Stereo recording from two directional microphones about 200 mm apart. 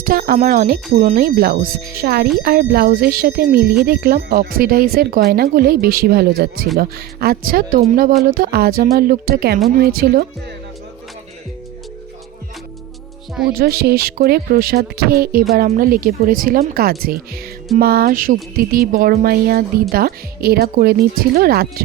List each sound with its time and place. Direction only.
0.0 s speech: 45° right (ahead or behind)
13.5 s speech: 50° right (ahead or behind)